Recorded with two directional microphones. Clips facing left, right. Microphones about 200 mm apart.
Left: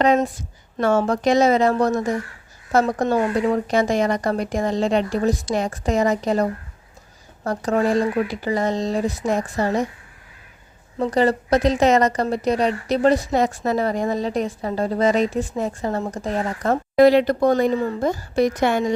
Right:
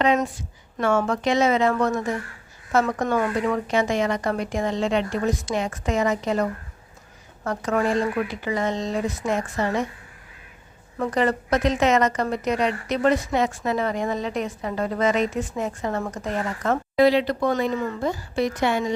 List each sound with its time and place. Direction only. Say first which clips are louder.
0.8 s a woman's voice: left 3 dB; 40° left (ahead or behind)
10.9 s a woman's voice: left 4 dB; 30° left (ahead or behind)
16.9 s speech: left 5 dB; 45° left (ahead or behind)